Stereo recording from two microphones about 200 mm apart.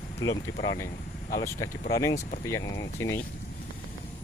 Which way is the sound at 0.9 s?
40° left (ahead or behind).